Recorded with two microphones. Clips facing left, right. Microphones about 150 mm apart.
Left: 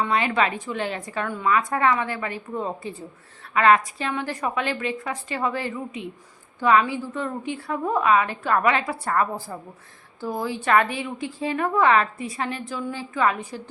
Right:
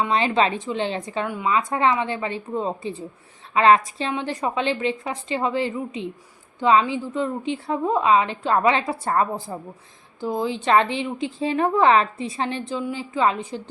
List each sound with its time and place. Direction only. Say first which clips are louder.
0.0 s a woman's voice: right 2 dB; 25° right (ahead or behind)